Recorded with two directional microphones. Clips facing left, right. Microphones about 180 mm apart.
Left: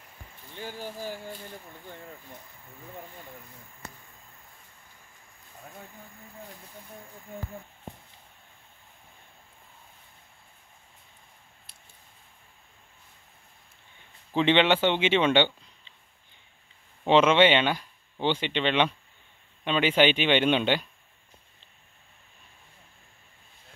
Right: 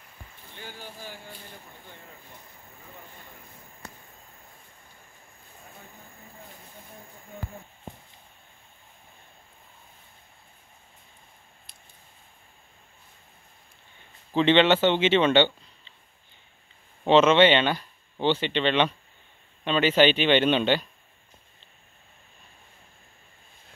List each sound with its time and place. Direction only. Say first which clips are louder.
0.6 s speech: left 6 dB; 40° left (ahead or behind)
14.3 s speech: right 3 dB; 10° left (ahead or behind)
17.0 s speech: right 2 dB; 10° left (ahead or behind)